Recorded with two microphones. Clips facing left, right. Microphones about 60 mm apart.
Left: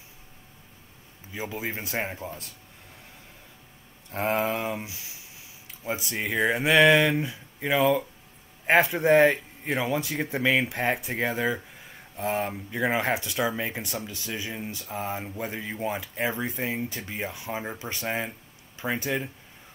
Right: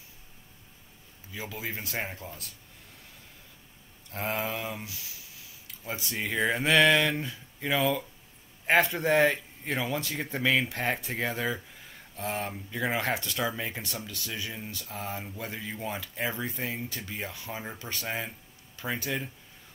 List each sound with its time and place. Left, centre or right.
1.3 s speech: left
4.1 s speech: left